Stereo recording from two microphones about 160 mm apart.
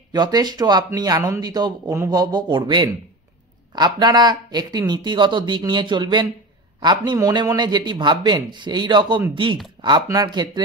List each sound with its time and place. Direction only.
0.1 s speech: 25° right (ahead or behind)